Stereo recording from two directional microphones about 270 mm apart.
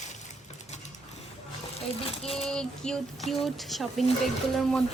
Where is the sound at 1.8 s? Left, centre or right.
Left.